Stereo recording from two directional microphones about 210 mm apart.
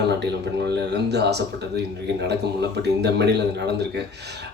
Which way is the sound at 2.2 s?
55° right (ahead or behind).